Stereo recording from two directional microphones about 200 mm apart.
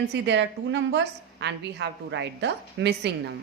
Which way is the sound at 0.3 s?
60° right (ahead or behind).